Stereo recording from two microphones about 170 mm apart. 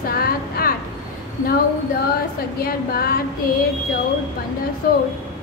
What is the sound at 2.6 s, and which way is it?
Speech, 60° left (ahead or behind).